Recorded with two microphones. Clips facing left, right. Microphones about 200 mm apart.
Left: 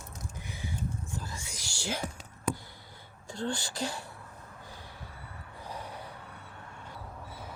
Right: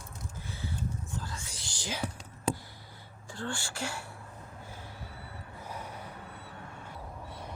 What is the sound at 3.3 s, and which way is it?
Speech, 20° left (ahead or behind).